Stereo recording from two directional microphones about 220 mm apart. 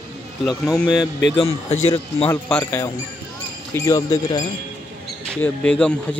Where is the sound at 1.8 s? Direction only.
25° left (ahead or behind).